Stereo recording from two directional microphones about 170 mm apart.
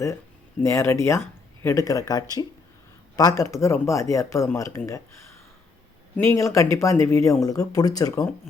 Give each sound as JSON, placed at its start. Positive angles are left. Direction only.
{"t": 0.6, "sound": "speech", "side_deg": 15}
{"t": 6.1, "sound": "speech", "side_deg": 15}